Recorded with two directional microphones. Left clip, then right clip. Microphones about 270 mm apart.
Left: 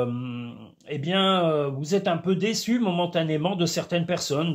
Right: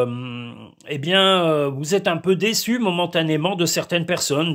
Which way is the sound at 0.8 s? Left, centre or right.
Right.